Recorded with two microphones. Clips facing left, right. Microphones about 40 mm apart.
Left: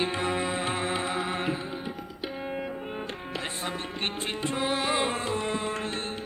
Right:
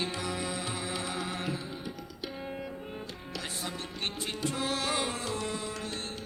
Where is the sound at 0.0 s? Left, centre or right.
Left.